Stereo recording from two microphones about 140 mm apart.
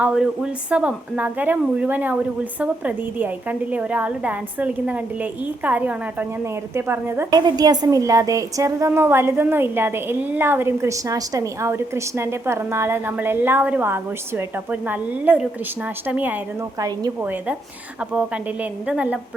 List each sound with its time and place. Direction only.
0.0 s a woman's voice: 5° right (ahead or behind)
7.3 s a woman's voice: 30° right (ahead or behind); by 19.2 s 10° right (ahead or behind)